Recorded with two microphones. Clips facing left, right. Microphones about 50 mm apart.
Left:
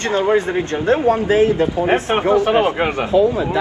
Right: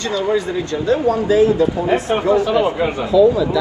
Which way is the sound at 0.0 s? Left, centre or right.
Left.